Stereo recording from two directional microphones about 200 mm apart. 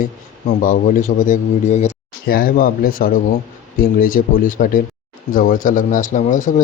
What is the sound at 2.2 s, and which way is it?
Speech, 50° left (ahead or behind).